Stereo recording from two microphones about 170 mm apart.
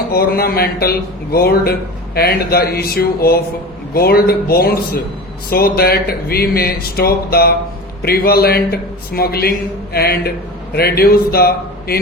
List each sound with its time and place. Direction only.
0.1 s a man's voice: 60° left (ahead or behind)